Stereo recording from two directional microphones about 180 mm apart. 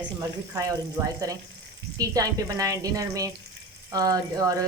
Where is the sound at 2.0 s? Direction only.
20° right (ahead or behind).